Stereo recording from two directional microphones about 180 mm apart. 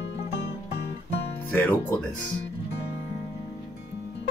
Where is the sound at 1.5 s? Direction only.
10° left (ahead or behind).